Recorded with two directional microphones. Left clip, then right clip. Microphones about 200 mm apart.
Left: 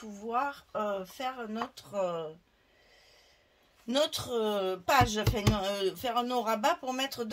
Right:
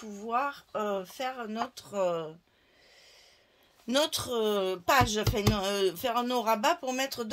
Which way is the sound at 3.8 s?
40° right (ahead or behind).